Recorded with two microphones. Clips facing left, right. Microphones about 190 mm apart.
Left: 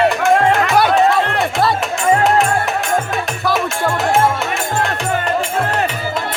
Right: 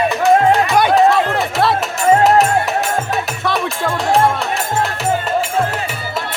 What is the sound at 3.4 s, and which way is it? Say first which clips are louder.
Music: left 3 dB; centre (ahead or behind).